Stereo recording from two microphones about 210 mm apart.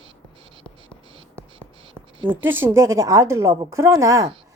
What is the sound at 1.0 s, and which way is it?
Writing, 25° right (ahead or behind).